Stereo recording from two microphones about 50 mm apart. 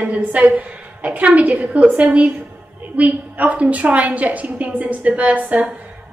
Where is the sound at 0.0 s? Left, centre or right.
Right.